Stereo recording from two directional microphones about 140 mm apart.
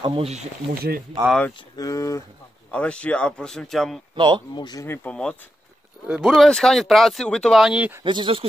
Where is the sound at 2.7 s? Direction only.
10° left (ahead or behind).